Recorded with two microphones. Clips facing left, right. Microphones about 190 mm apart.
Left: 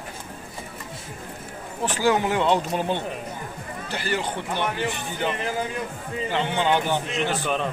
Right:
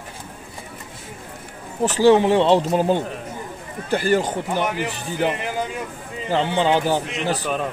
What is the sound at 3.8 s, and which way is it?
Speech, 45° right (ahead or behind).